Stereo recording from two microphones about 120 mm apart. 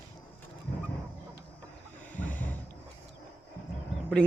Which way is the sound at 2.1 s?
15° left (ahead or behind).